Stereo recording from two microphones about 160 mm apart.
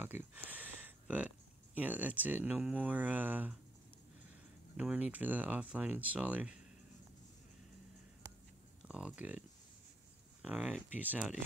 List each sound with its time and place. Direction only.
0.0 s a sound: 10° right (ahead or behind)
1.8 s speech: 10° right (ahead or behind)
4.7 s speech: 10° right (ahead or behind)
8.8 s speech: 5° right (ahead or behind)
10.4 s speech: 10° right (ahead or behind)